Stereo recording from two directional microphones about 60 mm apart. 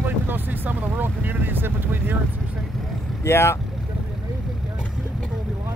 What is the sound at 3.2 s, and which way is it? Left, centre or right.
Speech, left.